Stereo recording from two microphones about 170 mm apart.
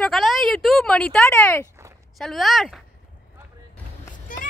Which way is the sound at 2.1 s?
Centre (ahead or behind).